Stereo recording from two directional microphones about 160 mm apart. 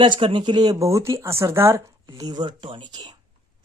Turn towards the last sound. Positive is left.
turn(degrees=-30)  # may be behind; listen again after turning